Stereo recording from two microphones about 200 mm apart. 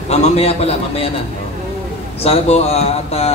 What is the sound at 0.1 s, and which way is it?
Speech, 30° left (ahead or behind).